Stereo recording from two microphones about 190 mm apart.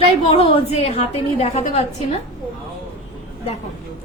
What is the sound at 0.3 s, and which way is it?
A woman's voice, 30° left (ahead or behind).